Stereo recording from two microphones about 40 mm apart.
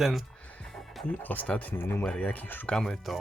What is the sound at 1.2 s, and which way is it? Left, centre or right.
Speech, left.